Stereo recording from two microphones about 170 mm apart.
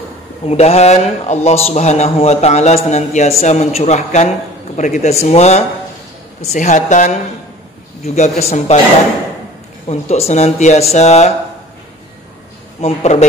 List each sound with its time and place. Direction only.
0.5 s a woman's voice: 40° left (ahead or behind)
9.8 s speech: 40° left (ahead or behind)
12.8 s speech: 40° left (ahead or behind)